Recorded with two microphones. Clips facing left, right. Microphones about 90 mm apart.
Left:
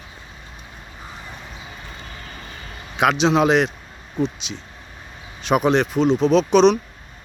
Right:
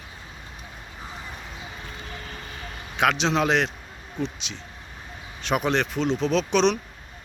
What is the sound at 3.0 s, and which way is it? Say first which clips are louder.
Speech: left 5 dB; 15° left (ahead or behind).